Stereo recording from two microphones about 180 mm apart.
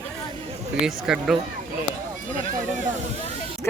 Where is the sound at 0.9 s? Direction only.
5° right (ahead or behind).